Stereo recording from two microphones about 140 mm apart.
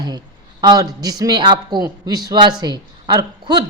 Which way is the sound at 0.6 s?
30° right (ahead or behind).